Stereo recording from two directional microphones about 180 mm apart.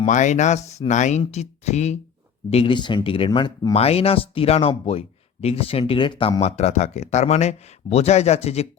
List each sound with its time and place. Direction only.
0.0 s speech: 40° left (ahead or behind); by 3.8 s 25° left (ahead or behind)
3.8 s speech: 35° left (ahead or behind)